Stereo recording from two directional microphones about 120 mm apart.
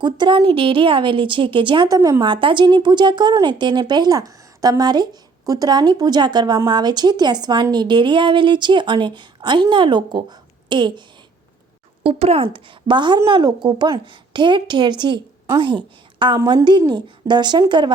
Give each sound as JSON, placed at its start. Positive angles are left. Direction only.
{"t": 0.0, "sound": "speech", "side_deg": -40}
{"t": 2.0, "sound": "speech", "side_deg": -25}
{"t": 2.2, "sound": "a woman's voice", "side_deg": -45}
{"t": 12.0, "sound": "a woman's voice", "side_deg": -55}